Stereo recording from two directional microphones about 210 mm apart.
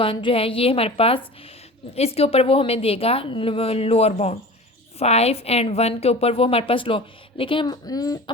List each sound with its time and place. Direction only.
0.0 s a woman's voice: 25° left (ahead or behind)